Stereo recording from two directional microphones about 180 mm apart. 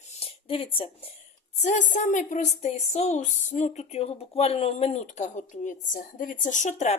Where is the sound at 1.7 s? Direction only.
40° left (ahead or behind).